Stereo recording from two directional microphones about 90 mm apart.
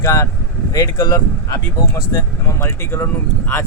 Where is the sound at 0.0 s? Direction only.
35° left (ahead or behind).